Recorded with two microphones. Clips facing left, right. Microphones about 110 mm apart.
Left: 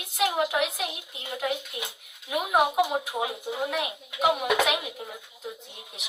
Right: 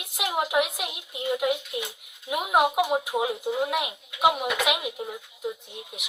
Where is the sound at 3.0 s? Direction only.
20° right (ahead or behind).